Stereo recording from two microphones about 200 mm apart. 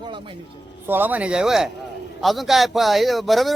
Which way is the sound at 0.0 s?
25° right (ahead or behind).